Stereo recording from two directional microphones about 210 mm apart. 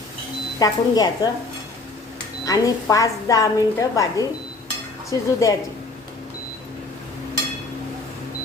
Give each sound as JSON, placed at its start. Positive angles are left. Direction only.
{"t": 0.6, "sound": "a woman's voice", "side_deg": 20}
{"t": 2.4, "sound": "a woman's voice", "side_deg": 15}